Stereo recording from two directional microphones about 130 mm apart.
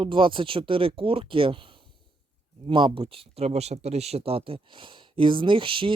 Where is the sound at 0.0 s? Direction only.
40° right (ahead or behind).